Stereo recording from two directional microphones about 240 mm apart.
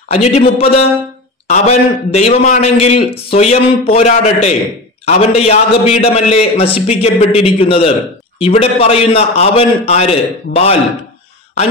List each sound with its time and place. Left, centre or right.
0.1 s a man's voice: left